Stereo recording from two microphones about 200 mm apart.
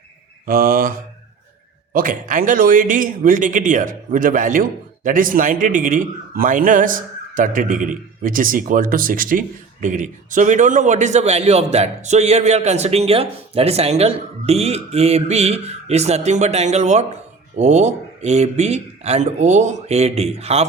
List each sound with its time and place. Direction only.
0.4 s a man's voice: 45° right (ahead or behind); by 20.7 s 30° right (ahead or behind)